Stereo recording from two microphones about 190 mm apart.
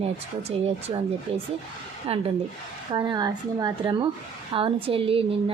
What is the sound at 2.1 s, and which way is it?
Speech, 35° right (ahead or behind).